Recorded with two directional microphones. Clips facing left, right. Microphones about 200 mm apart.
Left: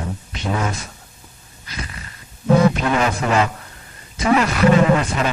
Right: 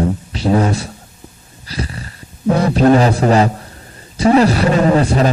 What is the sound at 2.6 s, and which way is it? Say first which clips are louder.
A man's voice: right 7 dB; 35° right (ahead or behind).